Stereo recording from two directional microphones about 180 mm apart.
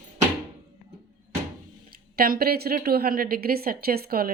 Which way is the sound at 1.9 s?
55° right (ahead or behind).